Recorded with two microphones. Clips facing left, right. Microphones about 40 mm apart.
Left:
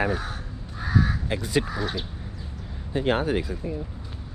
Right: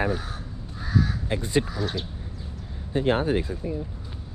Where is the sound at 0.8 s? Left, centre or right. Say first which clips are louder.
Left 1 dB; left.